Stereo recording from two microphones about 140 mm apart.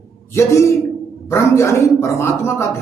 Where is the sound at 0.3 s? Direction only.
20° left (ahead or behind).